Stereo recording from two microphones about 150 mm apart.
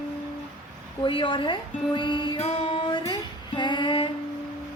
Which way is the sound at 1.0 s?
35° left (ahead or behind).